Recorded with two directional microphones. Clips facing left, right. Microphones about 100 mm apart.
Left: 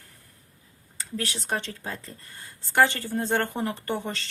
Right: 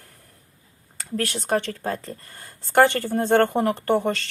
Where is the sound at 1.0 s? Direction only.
55° right (ahead or behind).